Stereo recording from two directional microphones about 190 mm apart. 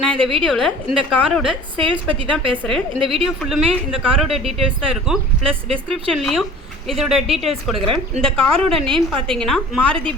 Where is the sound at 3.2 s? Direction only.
Centre (ahead or behind).